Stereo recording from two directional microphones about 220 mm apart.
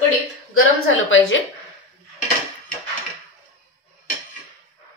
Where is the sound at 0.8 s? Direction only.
60° left (ahead or behind).